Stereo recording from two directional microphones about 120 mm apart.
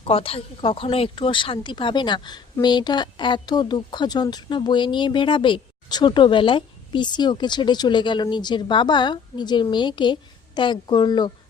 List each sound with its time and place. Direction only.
0.0 s speech: 50° left (ahead or behind)